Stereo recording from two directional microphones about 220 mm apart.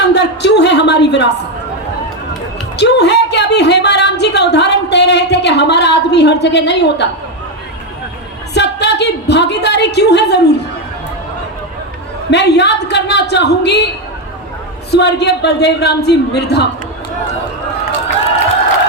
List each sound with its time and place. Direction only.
0.0 s a sound: 50° left (ahead or behind)
2.7 s speech: 50° left (ahead or behind)
8.5 s a woman's voice: 50° left (ahead or behind)
12.3 s a woman's voice: 50° left (ahead or behind)